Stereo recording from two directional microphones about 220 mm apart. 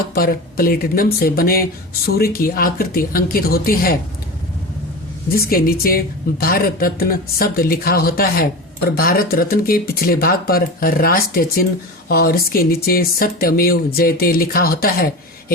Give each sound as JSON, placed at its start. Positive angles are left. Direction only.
{"t": 0.1, "sound": "speech", "side_deg": 45}
{"t": 5.3, "sound": "speech", "side_deg": 40}